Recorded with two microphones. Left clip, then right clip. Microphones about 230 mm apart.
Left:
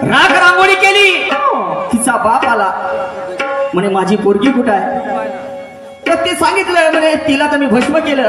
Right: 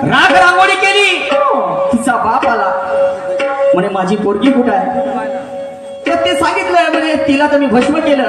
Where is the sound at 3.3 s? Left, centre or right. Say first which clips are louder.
Right 2 dB; left.